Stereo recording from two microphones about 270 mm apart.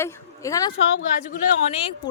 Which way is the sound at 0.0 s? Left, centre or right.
Centre.